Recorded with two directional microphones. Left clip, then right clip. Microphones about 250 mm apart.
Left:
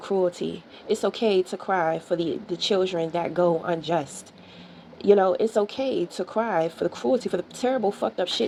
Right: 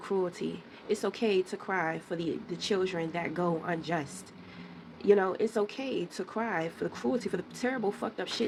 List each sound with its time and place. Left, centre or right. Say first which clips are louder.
0.0 s speech: left 8 dB; centre
5.0 s speech: left 7 dB; centre